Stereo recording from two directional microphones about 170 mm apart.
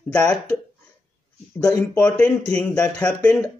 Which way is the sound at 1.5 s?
10° left (ahead or behind).